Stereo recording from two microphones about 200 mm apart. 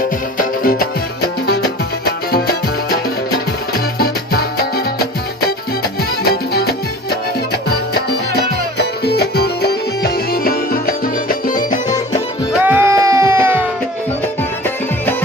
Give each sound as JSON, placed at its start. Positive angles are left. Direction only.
{"t": 0.3, "sound": "music", "side_deg": 45}
{"t": 8.4, "sound": "music", "side_deg": 55}
{"t": 12.5, "sound": "music", "side_deg": -10}